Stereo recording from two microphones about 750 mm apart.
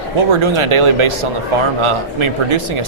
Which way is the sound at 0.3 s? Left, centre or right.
Right.